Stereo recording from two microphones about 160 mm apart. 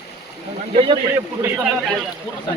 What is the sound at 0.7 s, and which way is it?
Speech, 30° right (ahead or behind).